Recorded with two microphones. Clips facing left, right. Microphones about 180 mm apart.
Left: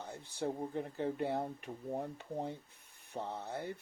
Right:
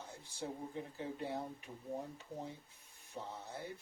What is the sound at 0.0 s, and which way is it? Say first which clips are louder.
Speech: left 7 dB; 65° left (ahead or behind).